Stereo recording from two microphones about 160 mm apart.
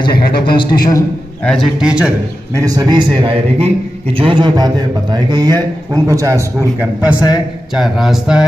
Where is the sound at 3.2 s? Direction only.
35° right (ahead or behind); by 7.2 s 15° right (ahead or behind).